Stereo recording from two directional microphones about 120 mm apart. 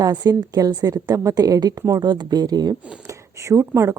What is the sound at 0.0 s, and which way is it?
A woman's voice, 35° right (ahead or behind).